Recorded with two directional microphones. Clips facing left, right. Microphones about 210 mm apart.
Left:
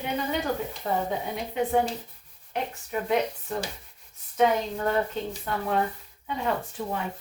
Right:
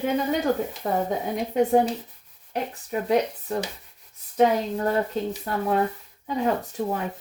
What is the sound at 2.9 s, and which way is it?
Speech, 35° right (ahead or behind).